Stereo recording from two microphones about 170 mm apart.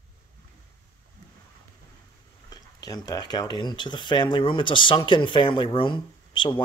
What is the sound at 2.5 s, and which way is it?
Speech, 20° left (ahead or behind).